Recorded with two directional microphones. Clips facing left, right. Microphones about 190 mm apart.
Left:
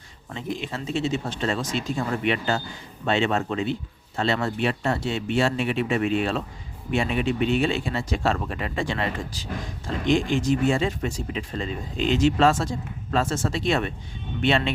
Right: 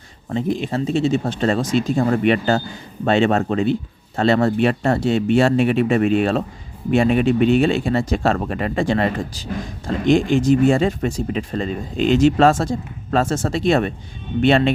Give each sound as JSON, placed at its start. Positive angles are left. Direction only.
{"t": 0.3, "sound": "speech", "side_deg": -40}